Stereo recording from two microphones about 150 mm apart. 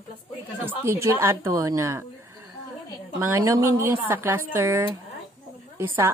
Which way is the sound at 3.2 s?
20° right (ahead or behind).